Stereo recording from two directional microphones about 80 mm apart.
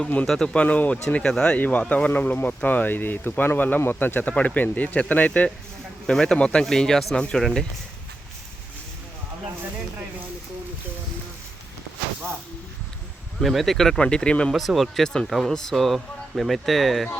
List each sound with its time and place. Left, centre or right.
0.0 s speech: centre
1.5 s speech: left
6.1 s speech: centre
13.4 s speech: centre
14.5 s speech: centre